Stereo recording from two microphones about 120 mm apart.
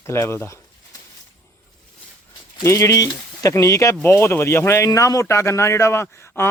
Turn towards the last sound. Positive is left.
turn(degrees=20)  # may be behind; listen again after turning